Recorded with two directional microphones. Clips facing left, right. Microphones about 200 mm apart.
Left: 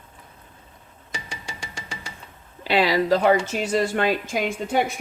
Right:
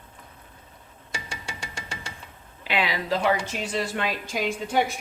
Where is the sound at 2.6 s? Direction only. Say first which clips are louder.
Left 7 dB; 35° left (ahead or behind).